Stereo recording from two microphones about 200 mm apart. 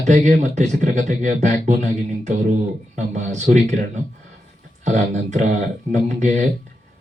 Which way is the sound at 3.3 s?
35° right (ahead or behind).